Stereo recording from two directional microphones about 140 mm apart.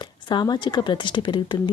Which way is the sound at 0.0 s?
35° left (ahead or behind).